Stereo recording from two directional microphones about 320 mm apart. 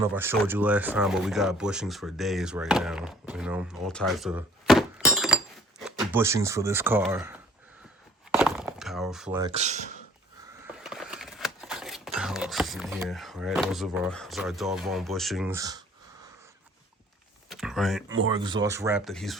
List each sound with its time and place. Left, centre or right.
0.0 s speech: centre
8.4 s breaking: centre
9.5 s speech: right
10.8 s speech: centre
17.5 s a sound: centre
18.1 s speech: centre